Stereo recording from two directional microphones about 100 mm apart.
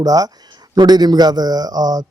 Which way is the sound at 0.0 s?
40° right (ahead or behind).